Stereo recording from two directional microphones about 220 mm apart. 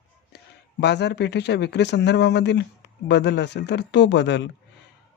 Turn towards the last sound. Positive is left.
turn(degrees=55)  # may be behind; listen again after turning